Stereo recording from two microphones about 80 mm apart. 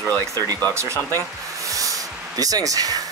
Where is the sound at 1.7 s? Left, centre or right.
Right.